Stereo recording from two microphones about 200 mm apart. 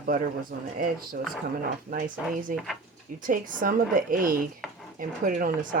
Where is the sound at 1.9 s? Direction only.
45° right (ahead or behind).